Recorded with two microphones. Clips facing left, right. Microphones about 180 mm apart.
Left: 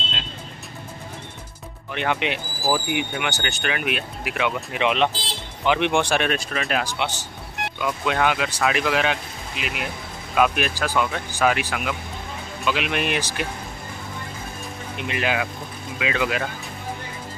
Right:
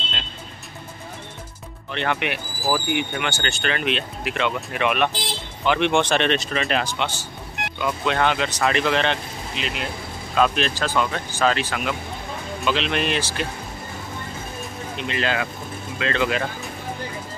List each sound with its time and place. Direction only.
1.9 s speech: 15° left (ahead or behind)
15.0 s speech: 15° left (ahead or behind)